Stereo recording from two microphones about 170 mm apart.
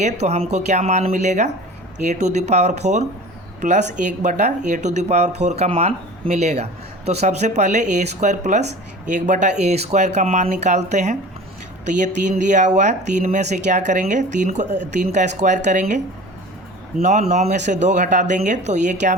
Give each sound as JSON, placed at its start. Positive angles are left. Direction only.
{"t": 0.0, "sound": "speech", "side_deg": -40}
{"t": 17.0, "sound": "speech", "side_deg": -45}